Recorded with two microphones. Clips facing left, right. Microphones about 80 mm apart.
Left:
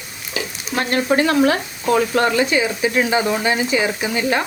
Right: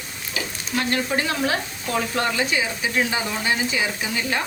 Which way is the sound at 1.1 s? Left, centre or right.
Left.